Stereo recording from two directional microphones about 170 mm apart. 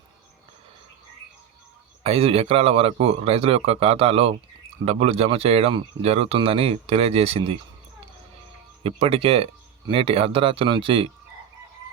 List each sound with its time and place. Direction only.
2.0 s speech: 35° right (ahead or behind)
8.8 s speech: 35° right (ahead or behind)